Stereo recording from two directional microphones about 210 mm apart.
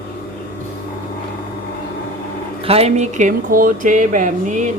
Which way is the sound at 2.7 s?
30° right (ahead or behind).